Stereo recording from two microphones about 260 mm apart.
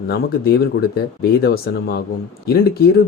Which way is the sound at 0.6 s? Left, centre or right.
Left.